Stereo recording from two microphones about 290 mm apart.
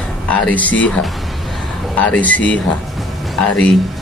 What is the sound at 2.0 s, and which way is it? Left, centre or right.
Speech, centre.